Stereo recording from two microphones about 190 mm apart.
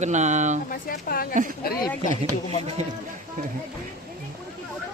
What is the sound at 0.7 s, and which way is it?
Speech, 50° left (ahead or behind).